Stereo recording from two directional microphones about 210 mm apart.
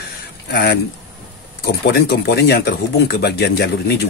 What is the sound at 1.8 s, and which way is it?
Speech, 50° left (ahead or behind).